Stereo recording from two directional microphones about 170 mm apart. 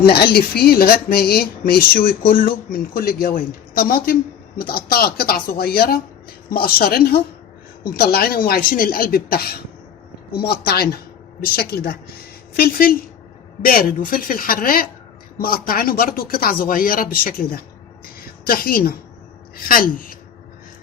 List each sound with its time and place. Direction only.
0.0 s speech: 65° left (ahead or behind)
14.1 s speech: 55° left (ahead or behind)
18.0 s a sound: 60° left (ahead or behind)
19.5 s speech: 55° left (ahead or behind)